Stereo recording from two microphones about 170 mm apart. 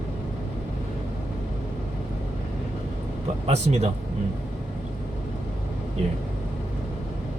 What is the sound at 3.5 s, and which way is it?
Speech, 40° right (ahead or behind).